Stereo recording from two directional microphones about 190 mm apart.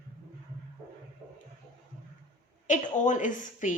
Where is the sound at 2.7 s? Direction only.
40° left (ahead or behind).